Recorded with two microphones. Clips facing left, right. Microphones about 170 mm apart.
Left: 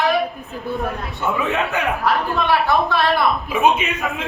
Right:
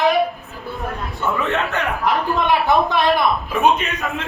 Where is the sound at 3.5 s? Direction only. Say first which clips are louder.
Left 1 dB; centre (ahead or behind).